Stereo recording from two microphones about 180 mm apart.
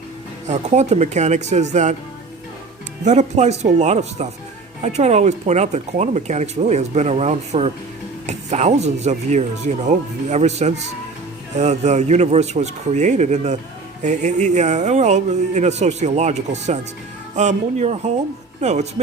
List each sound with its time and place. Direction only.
0.4 s speech: 40° right (ahead or behind)
3.0 s speech: 40° right (ahead or behind)